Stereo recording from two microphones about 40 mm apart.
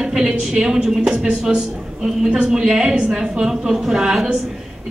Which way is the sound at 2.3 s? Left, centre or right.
Centre.